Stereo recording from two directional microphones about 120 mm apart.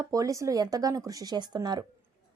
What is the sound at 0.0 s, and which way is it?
A woman's voice, 30° right (ahead or behind).